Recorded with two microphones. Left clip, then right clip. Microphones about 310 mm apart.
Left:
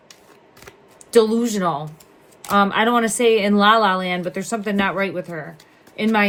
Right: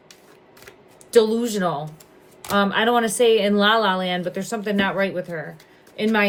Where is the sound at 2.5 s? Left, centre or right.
Left.